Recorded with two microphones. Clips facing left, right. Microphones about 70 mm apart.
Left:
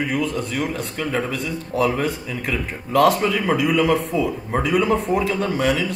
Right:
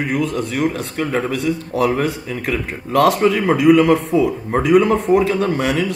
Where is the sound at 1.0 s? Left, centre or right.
Centre.